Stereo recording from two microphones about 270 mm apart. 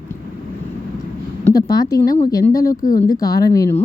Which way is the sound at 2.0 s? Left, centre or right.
Left.